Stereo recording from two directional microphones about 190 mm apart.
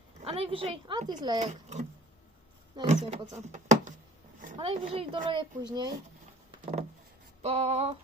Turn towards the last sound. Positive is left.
turn(degrees=-35)  # may be behind; listen again after turning